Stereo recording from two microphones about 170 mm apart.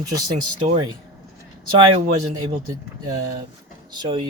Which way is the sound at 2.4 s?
20° right (ahead or behind).